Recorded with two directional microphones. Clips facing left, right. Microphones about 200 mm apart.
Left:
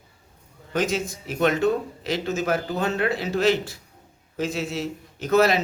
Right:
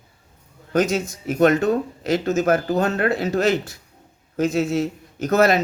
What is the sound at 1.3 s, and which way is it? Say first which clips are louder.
Speech: right 4 dB; 45° right (ahead or behind).